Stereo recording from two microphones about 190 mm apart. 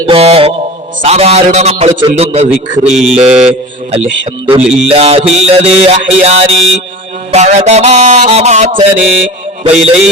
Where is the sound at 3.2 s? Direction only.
35° right (ahead or behind).